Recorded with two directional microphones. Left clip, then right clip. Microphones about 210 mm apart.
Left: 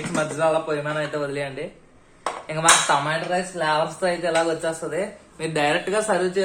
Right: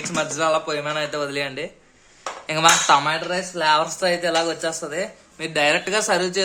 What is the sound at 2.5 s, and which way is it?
Dishes, 50° right (ahead or behind).